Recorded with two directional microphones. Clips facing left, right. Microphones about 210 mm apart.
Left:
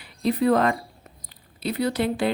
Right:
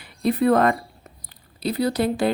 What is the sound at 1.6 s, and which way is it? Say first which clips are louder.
Speech: right 2 dB; 35° right (ahead or behind).